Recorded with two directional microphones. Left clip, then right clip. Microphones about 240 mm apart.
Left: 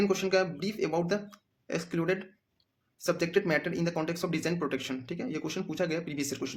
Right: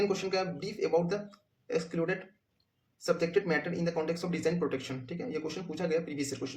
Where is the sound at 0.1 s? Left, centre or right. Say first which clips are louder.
Left 4 dB; left.